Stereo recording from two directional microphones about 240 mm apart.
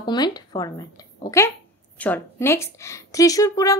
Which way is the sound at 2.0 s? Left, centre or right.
Centre.